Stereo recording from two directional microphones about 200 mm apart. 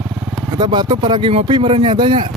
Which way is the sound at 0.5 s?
25° right (ahead or behind).